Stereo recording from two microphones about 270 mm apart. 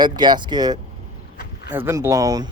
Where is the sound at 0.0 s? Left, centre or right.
Centre.